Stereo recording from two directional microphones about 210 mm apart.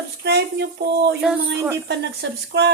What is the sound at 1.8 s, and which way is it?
Speech, 55° right (ahead or behind).